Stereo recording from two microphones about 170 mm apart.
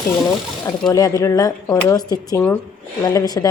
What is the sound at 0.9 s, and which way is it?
A woman's voice, 20° left (ahead or behind).